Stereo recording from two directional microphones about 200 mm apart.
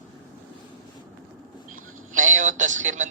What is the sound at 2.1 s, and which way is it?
Speech, 40° right (ahead or behind).